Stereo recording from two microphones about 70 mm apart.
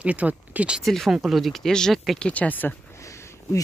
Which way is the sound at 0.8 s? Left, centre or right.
Centre.